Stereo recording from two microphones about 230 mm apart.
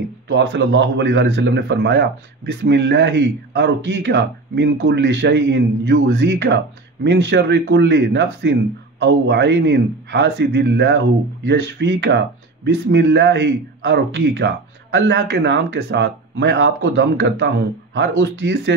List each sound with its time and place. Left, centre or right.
0.3 s a man's voice: right